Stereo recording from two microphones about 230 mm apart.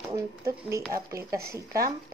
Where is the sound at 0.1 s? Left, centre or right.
Centre.